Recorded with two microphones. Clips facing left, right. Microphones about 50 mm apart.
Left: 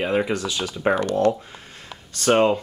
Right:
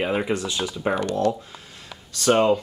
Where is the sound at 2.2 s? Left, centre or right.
Left.